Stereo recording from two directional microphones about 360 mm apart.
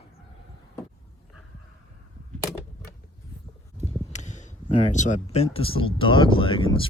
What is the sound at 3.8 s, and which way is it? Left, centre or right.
Speech, centre.